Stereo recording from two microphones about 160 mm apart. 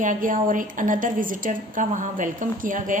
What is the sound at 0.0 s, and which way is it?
A woman's voice, 55° right (ahead or behind).